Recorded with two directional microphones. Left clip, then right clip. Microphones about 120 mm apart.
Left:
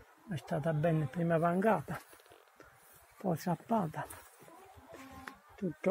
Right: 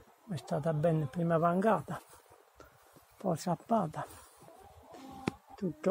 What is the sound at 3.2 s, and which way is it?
Speech, 15° left (ahead or behind).